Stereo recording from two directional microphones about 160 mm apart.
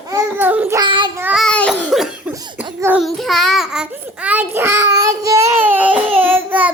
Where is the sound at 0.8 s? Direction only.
30° right (ahead or behind).